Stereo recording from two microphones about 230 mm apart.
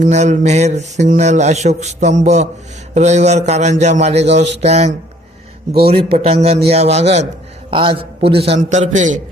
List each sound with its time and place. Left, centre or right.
0.0 s a man's voice: right